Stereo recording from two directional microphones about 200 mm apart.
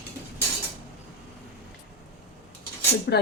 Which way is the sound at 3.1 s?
55° left (ahead or behind).